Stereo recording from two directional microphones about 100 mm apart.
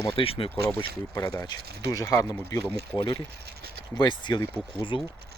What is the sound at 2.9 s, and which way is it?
Speech, 55° left (ahead or behind).